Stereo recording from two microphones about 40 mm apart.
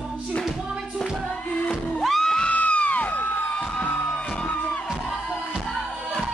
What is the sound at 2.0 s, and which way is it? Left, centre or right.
Music, centre.